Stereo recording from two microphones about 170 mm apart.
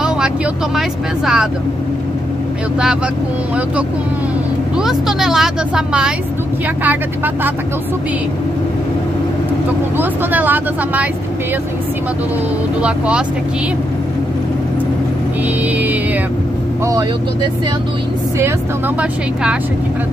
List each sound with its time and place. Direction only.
0.7 s speech: centre (ahead or behind)
4.7 s speech: 5° right (ahead or behind)
9.9 s speech: 10° right (ahead or behind)
12.8 s speech: 5° right (ahead or behind)